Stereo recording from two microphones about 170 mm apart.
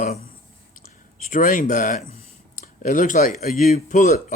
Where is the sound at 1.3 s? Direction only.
50° left (ahead or behind).